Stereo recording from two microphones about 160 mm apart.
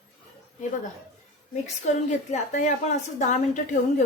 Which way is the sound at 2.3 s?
50° left (ahead or behind).